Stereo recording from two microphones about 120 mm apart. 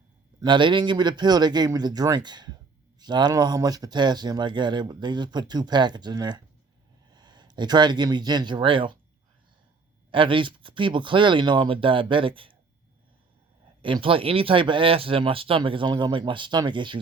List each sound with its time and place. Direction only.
0.4 s speech: 40° right (ahead or behind)
10.1 s speech: 45° right (ahead or behind)
13.8 s speech: 45° right (ahead or behind)